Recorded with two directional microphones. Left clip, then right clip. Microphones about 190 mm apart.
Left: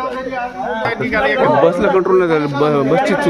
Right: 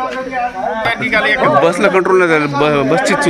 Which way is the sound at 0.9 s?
30° right (ahead or behind).